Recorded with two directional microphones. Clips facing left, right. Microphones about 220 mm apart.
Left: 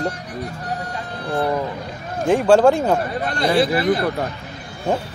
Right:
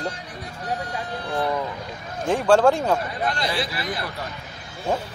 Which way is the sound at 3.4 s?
50° left (ahead or behind).